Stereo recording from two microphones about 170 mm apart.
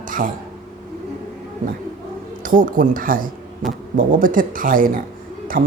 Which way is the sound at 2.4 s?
55° right (ahead or behind).